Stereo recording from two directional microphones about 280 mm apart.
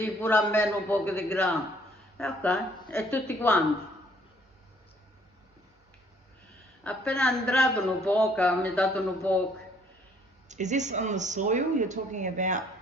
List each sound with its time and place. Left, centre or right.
0.0 s speech: centre
6.8 s speech: centre
10.5 s speech: right